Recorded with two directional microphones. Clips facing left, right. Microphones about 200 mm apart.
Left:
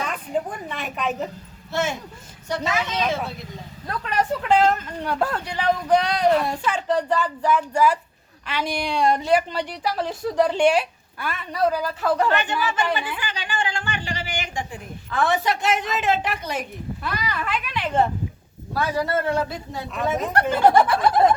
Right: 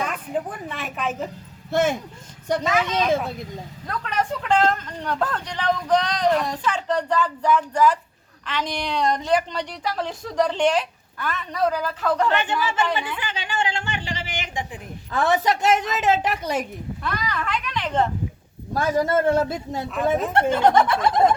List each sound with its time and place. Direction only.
0.0 s a woman's voice: 5° right (ahead or behind)
1.7 s a man's voice: 55° right (ahead or behind)
3.8 s speech: 5° left (ahead or behind)
12.3 s speech: 25° right (ahead or behind)
13.1 s a sound: 25° right (ahead or behind)
15.1 s a man's voice: 40° right (ahead or behind)
17.0 s speech: 5° left (ahead or behind)
18.7 s a man's voice: 45° right (ahead or behind)
20.5 s speech: 5° left (ahead or behind)